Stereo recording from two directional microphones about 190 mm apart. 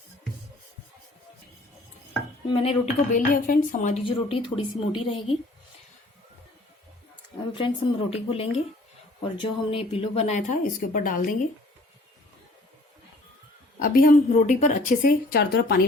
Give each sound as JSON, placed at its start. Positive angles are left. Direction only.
{"t": 2.5, "sound": "speech", "side_deg": 30}
{"t": 3.2, "sound": "a woman's voice", "side_deg": 45}
{"t": 4.0, "sound": "a woman's voice", "side_deg": 25}
{"t": 7.5, "sound": "a woman's voice", "side_deg": 30}
{"t": 13.8, "sound": "a woman's voice", "side_deg": 50}